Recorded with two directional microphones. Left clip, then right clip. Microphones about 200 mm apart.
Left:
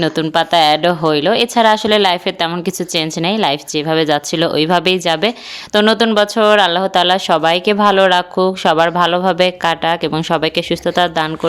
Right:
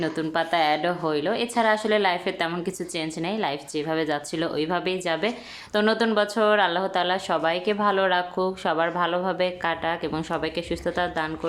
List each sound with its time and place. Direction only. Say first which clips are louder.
0.0 s speech: left 11 dB; 45° left (ahead or behind)